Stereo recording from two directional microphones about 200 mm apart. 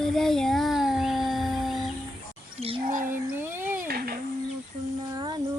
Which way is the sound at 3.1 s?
10° right (ahead or behind).